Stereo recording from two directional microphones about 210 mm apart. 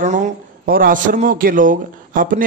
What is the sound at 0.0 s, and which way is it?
A man's voice, 35° right (ahead or behind).